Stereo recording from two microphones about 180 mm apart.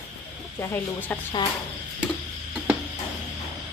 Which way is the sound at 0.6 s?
10° left (ahead or behind).